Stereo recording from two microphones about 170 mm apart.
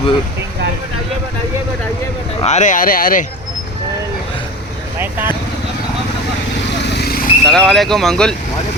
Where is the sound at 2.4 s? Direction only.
45° left (ahead or behind).